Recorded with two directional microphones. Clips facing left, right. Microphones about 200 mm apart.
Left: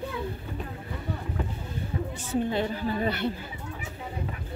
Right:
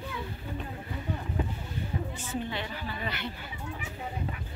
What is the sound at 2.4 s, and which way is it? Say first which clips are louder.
Speech: left 8 dB; 45° left (ahead or behind).